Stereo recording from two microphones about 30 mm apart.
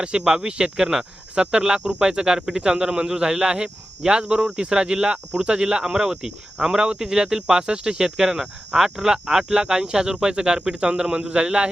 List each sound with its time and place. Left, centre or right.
0.0 s speech: right